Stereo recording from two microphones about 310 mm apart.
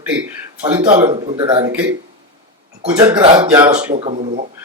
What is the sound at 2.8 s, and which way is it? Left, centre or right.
Speech, centre.